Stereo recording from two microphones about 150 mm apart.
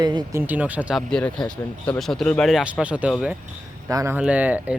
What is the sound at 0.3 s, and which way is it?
Speech, 10° right (ahead or behind).